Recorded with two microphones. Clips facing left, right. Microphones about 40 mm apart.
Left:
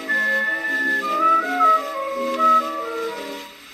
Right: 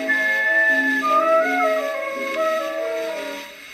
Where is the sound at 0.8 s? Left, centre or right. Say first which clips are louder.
Right 1 dB; centre.